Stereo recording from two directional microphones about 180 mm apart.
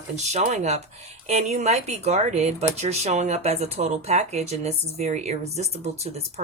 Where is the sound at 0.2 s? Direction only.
40° right (ahead or behind).